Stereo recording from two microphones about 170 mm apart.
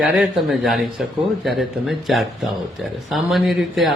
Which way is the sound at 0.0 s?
Centre (ahead or behind).